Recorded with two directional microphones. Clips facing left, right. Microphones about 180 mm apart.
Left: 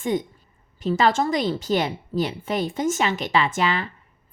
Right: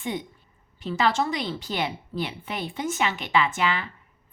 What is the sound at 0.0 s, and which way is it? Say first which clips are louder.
A woman's voice: left 7 dB; 45° left (ahead or behind).